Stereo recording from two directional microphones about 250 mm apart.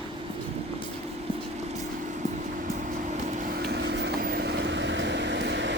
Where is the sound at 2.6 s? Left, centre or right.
Right.